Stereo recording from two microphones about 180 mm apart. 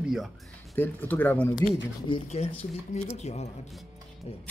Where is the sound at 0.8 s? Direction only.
10° left (ahead or behind).